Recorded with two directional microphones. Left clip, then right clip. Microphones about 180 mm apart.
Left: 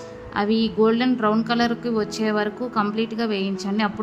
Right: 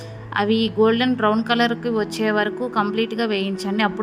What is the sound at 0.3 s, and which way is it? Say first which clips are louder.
A woman's voice: right 2 dB; 30° right (ahead or behind).